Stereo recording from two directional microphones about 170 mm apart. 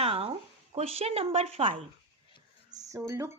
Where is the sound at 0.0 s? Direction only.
35° right (ahead or behind).